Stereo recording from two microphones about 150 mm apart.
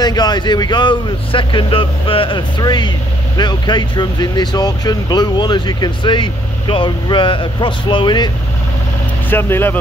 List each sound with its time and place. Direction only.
0.0 s speech: 30° left (ahead or behind)
9.3 s speech: 15° left (ahead or behind)